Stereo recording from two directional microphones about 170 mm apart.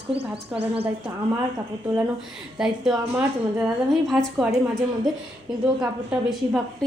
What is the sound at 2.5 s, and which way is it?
Speech, 5° right (ahead or behind).